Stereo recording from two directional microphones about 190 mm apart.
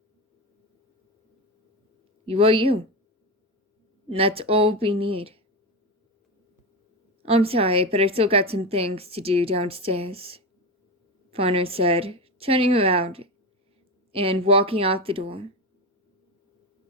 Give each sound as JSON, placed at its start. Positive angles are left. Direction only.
{"t": 2.2, "sound": "speech", "side_deg": -30}
{"t": 4.1, "sound": "a woman's voice", "side_deg": -30}
{"t": 7.2, "sound": "a woman's voice", "side_deg": -30}